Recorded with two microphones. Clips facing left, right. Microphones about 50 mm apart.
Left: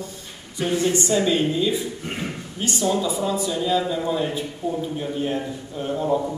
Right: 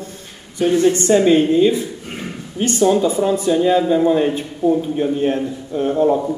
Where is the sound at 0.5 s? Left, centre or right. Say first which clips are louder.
Right 7 dB; right.